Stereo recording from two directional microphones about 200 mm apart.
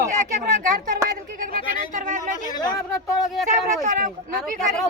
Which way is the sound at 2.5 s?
20° left (ahead or behind).